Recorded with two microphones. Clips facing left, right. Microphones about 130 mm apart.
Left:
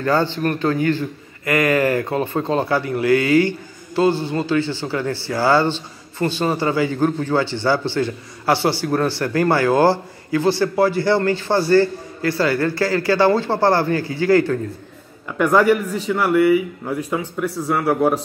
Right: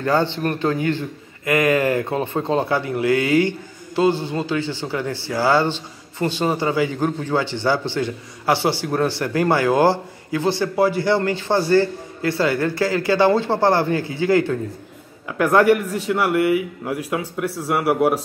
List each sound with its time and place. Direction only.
0.0 s a man's voice: 20° right (ahead or behind)
15.2 s a man's voice: centre (ahead or behind)